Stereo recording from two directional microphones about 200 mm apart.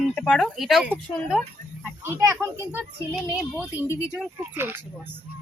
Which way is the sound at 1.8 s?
15° right (ahead or behind).